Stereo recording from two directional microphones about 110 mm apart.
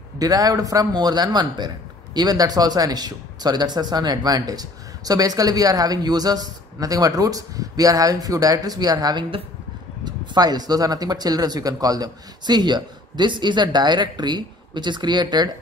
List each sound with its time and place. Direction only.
0.2 s speech: 35° right (ahead or behind)